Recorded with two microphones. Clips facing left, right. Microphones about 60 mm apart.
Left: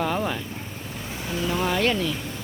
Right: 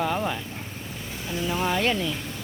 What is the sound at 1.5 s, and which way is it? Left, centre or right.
Speech, centre.